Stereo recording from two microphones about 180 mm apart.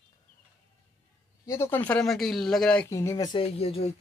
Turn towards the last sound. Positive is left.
turn(degrees=35)  # may be behind; listen again after turning